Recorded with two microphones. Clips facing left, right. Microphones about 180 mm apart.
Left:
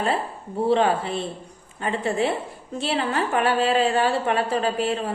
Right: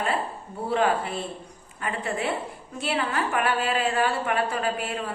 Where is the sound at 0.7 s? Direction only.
25° left (ahead or behind).